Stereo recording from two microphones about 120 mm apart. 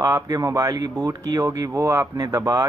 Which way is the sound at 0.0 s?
30° right (ahead or behind).